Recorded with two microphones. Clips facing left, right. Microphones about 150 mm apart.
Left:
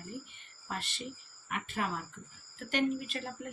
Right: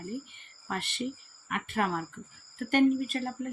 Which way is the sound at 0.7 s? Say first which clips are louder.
Right 7 dB; 60° right (ahead or behind).